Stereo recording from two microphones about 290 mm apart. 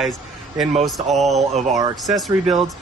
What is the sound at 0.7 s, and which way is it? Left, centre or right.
Speech, right.